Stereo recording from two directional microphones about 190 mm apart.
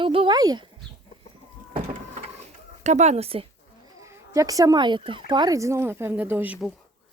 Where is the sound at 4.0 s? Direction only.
15° right (ahead or behind).